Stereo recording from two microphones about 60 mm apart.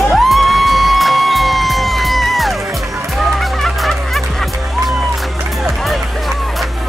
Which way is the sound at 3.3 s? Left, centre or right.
Centre.